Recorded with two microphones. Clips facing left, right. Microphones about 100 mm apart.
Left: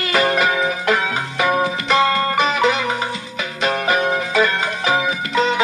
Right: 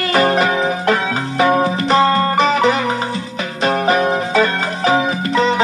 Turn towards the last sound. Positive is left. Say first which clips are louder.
# right 3 dB
turn(degrees=-35)  # may be behind; listen again after turning